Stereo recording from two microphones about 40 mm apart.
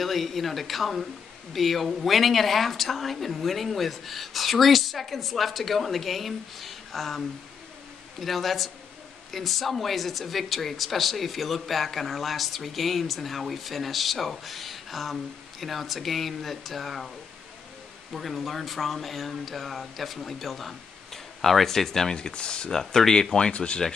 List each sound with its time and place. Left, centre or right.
0.0 s speech: centre
18.1 s speech: centre
22.1 s speech: left
22.7 s speech: centre
23.5 s speech: left